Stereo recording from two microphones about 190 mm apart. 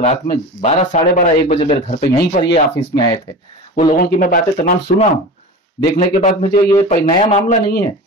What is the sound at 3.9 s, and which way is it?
Speech, 50° left (ahead or behind).